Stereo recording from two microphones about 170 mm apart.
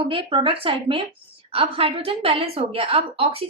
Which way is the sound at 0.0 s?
30° right (ahead or behind).